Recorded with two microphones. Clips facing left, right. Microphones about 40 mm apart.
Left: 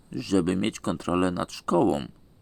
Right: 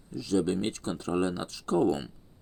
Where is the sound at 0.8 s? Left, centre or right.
Left.